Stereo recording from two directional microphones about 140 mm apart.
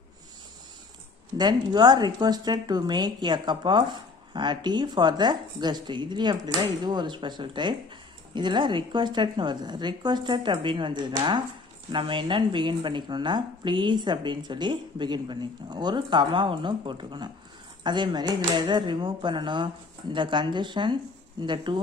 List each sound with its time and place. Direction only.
1.4 s speech: 30° right (ahead or behind)